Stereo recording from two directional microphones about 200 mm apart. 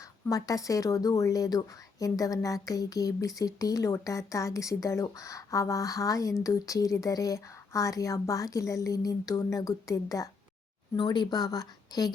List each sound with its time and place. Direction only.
0.3 s a woman's voice: 15° left (ahead or behind)